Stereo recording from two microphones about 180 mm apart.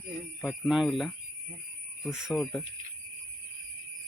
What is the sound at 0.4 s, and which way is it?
A man's voice, centre (ahead or behind).